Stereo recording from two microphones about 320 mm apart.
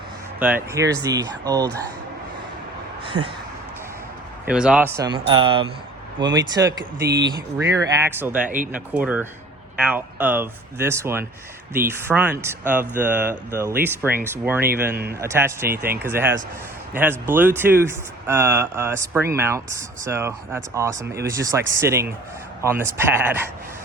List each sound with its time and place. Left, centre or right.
0.3 s speech: centre
3.1 s speech: right
4.4 s speech: centre
7.0 s speech: right
7.7 s speech: centre